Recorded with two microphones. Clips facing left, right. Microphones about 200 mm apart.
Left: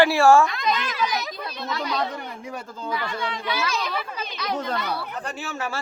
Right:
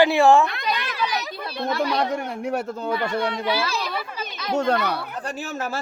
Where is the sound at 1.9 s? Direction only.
70° right (ahead or behind).